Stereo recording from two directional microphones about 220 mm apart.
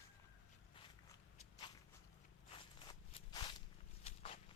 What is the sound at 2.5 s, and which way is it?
Walk, 20° left (ahead or behind).